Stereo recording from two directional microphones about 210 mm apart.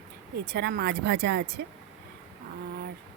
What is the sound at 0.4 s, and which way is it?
Speech, 50° right (ahead or behind).